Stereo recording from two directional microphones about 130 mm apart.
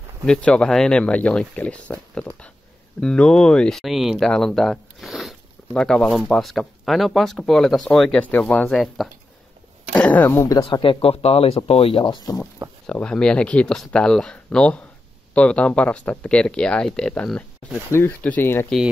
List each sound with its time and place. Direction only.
0.2 s speech: 10° left (ahead or behind)
9.9 s speech: 10° left (ahead or behind)
10.6 s speech: 40° left (ahead or behind)
12.8 s speech: 5° left (ahead or behind)